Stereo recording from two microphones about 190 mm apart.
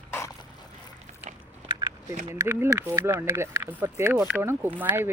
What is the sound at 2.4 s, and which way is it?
Speech, 15° right (ahead or behind).